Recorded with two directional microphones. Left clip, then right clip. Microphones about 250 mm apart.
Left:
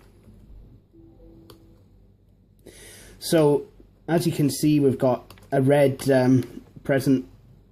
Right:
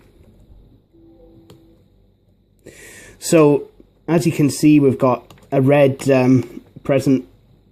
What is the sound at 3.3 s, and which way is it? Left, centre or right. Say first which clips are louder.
Speech: right 7 dB; right.